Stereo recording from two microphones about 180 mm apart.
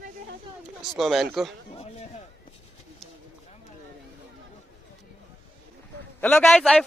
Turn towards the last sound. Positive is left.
turn(degrees=5)  # may be behind; listen again after turning